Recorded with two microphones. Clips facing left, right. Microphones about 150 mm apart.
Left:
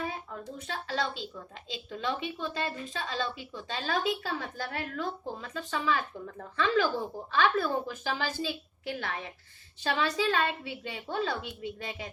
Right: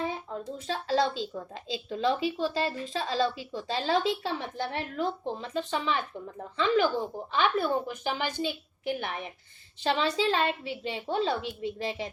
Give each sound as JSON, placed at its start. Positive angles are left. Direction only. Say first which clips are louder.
{"t": 0.0, "sound": "speech", "louder": "right 4 dB", "side_deg": -25}